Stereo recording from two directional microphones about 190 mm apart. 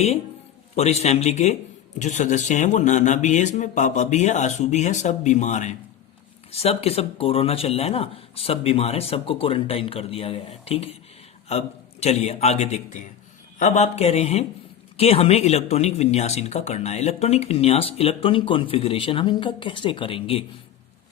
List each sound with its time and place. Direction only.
0.8 s speech: 35° left (ahead or behind)